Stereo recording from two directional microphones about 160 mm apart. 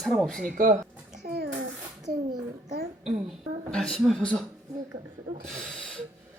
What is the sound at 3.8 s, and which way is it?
Speech, centre (ahead or behind).